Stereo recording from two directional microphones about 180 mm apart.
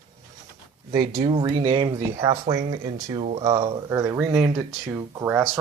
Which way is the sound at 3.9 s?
15° right (ahead or behind).